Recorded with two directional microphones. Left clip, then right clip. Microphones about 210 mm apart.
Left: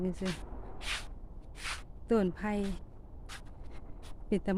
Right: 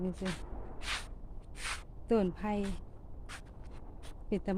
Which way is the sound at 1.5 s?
15° right (ahead or behind).